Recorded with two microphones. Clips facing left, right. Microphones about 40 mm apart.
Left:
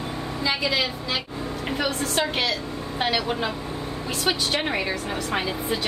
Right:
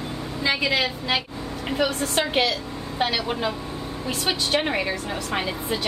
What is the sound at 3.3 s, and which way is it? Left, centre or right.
A woman's voice, centre.